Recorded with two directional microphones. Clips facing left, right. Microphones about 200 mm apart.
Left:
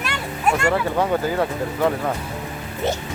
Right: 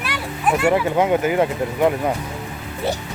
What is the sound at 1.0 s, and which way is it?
Speech, 20° right (ahead or behind).